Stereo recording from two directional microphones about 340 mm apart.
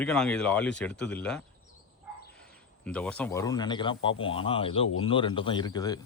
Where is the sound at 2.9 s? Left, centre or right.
Centre.